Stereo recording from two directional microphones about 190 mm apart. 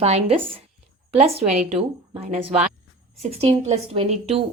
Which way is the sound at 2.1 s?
30° right (ahead or behind).